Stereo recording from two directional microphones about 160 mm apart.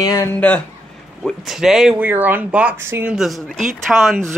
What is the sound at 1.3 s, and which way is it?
Speech, centre (ahead or behind).